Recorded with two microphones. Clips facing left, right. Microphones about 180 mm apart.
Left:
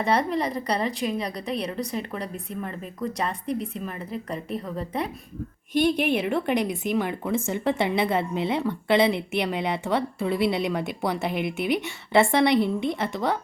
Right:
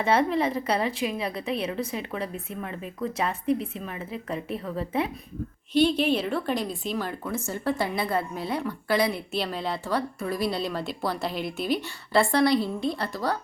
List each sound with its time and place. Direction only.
0.0 s a woman's voice: centre (ahead or behind)
5.8 s a woman's voice: 15° left (ahead or behind)